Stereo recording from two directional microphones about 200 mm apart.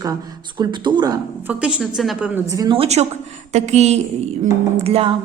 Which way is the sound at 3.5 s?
35° right (ahead or behind).